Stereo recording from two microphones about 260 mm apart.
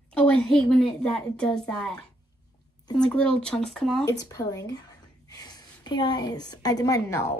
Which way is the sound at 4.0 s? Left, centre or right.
Centre.